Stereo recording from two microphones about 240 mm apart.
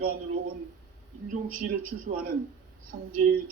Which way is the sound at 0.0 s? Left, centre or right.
Right.